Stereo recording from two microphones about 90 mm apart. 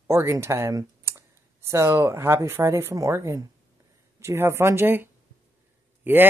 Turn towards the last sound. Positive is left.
turn(degrees=-25)  # may be behind; listen again after turning